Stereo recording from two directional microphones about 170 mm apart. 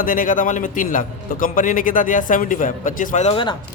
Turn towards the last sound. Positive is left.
turn(degrees=45)  # may be behind; listen again after turning